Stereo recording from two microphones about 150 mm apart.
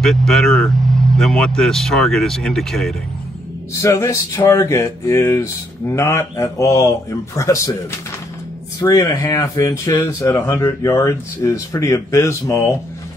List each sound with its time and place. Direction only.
0.0 s speech: centre (ahead or behind)
3.8 s speech: 20° left (ahead or behind)
8.7 s speech: 25° left (ahead or behind)